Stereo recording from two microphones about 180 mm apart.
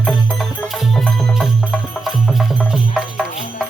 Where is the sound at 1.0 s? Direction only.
Centre (ahead or behind).